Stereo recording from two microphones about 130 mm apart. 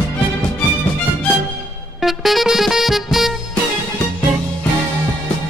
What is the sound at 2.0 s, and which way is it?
Music, centre (ahead or behind).